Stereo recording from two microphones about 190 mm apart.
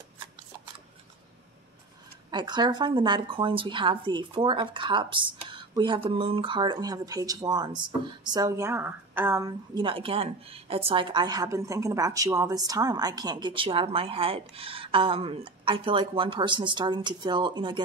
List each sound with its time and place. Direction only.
2.3 s a woman's voice: 25° right (ahead or behind)
9.8 s a woman's voice: 25° right (ahead or behind)